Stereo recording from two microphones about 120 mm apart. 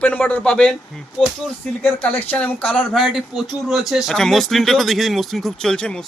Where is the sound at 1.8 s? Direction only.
15° left (ahead or behind).